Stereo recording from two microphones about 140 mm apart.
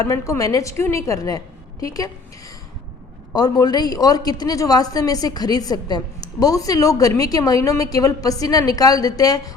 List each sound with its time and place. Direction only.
0.0 s a woman's voice: 25° left (ahead or behind)
3.3 s a woman's voice: 30° left (ahead or behind)